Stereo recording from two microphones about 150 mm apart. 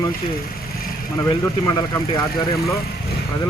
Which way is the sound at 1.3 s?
30° left (ahead or behind).